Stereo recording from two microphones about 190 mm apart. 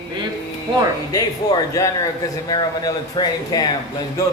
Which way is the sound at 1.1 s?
20° left (ahead or behind).